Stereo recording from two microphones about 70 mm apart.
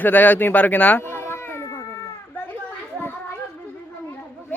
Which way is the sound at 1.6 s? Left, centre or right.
Left.